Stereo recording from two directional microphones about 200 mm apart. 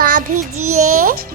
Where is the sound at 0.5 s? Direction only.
90° right.